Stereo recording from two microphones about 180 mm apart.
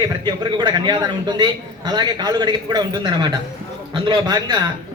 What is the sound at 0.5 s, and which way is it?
A man's voice, 25° right (ahead or behind).